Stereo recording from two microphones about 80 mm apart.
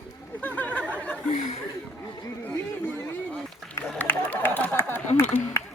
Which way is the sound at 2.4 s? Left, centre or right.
Centre.